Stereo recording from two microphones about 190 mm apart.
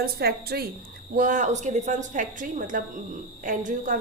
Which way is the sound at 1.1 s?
45° right (ahead or behind).